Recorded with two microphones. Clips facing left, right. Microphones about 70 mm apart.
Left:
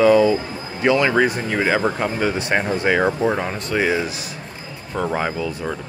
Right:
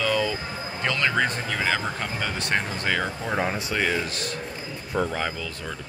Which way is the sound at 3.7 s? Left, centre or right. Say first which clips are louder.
Left 6 dB; centre.